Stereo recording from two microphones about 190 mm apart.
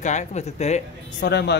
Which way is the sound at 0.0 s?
40° left (ahead or behind).